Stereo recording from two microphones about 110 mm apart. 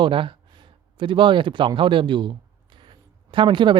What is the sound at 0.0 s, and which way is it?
Speech, 50° right (ahead or behind).